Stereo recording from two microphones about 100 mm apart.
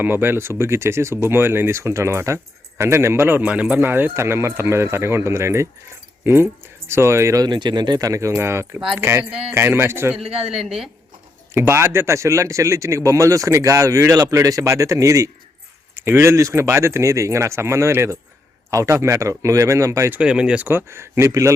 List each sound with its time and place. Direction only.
0.0 s speech: 20° right (ahead or behind)
7.4 s speech: 50° right (ahead or behind); by 10.2 s 25° right (ahead or behind)
11.5 s speech: 25° right (ahead or behind)
20.1 s speech: 10° right (ahead or behind)
20.7 s speech: 25° right (ahead or behind)